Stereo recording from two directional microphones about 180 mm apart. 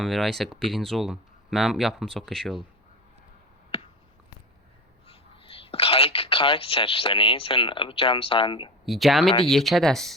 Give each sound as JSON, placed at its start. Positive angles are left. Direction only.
{"t": 0.0, "sound": "speech", "side_deg": 0}
{"t": 5.0, "sound": "speech", "side_deg": 30}
{"t": 8.9, "sound": "speech", "side_deg": 0}